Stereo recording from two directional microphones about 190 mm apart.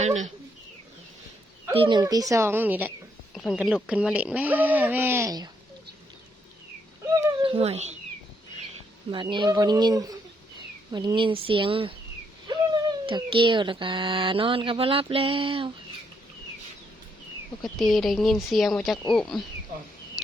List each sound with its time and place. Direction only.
0.0 s speech: 40° right (ahead or behind)
1.7 s speech: 25° right (ahead or behind)
7.4 s speech: 30° right (ahead or behind)
9.1 s speech: 25° right (ahead or behind)
17.6 s speech: centre (ahead or behind)